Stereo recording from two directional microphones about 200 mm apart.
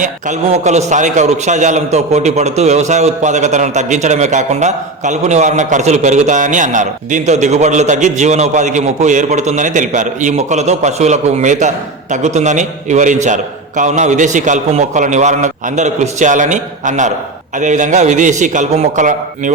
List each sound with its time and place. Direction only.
0.0 s a man's voice: 35° right (ahead or behind)